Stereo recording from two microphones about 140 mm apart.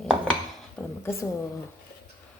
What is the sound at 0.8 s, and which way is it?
Speech, 20° left (ahead or behind).